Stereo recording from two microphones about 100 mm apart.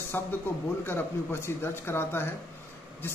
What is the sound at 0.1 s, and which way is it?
A man's voice, 20° left (ahead or behind).